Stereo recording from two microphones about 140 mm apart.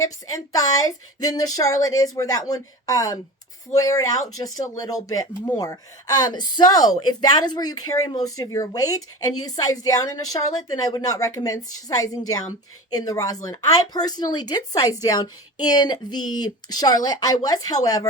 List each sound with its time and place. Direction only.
0.0 s speech: 25° left (ahead or behind)